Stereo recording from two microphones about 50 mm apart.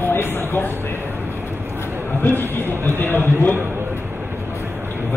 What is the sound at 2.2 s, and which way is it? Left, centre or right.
Speech, left.